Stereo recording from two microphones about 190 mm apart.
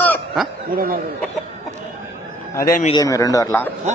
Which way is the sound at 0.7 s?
50° right (ahead or behind).